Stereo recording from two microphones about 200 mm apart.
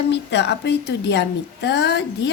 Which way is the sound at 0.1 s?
60° left (ahead or behind).